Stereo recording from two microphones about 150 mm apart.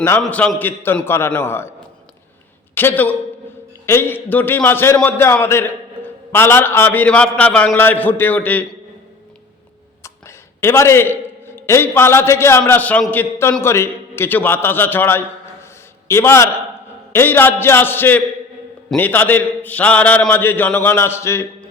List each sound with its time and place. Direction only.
0.2 s a man's voice: 10° left (ahead or behind)
2.7 s a man's voice: 15° left (ahead or behind)
10.0 s a man's voice: 15° left (ahead or behind)